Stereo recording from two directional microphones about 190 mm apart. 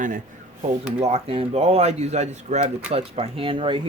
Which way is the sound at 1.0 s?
30° right (ahead or behind).